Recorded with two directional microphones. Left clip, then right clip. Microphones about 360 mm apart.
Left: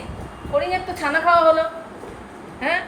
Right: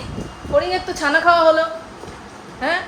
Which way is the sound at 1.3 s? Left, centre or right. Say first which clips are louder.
Even; centre.